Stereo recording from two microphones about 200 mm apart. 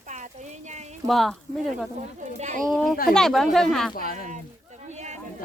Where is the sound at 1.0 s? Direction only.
Centre (ahead or behind).